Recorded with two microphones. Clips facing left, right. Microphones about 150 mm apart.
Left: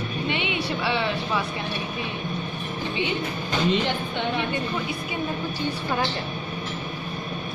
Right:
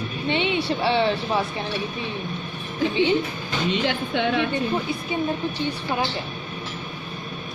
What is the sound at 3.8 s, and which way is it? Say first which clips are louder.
Speech: right 3 dB; 90° right.